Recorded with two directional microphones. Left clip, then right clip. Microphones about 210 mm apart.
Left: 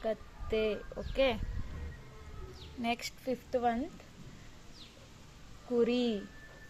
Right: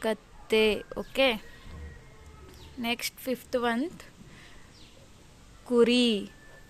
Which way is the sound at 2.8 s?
15° right (ahead or behind).